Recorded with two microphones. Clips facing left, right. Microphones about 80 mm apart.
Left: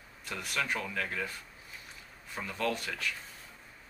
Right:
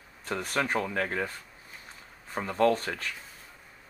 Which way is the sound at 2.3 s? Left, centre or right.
Right.